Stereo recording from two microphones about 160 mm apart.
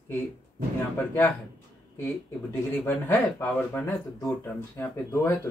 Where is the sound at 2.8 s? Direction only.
10° left (ahead or behind).